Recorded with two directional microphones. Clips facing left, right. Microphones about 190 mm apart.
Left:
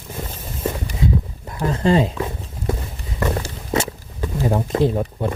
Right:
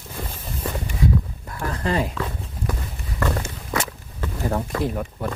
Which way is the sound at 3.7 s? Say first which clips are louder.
Left 5 dB; 20° left (ahead or behind).